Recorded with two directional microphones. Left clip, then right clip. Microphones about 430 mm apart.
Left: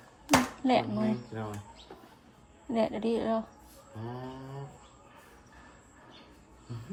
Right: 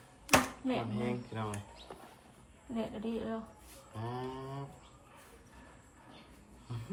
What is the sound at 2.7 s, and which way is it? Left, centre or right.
Speech, centre.